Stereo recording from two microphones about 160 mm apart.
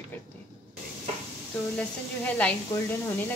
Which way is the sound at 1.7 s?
10° left (ahead or behind).